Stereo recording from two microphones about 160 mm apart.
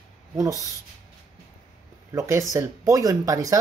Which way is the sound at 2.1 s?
20° right (ahead or behind).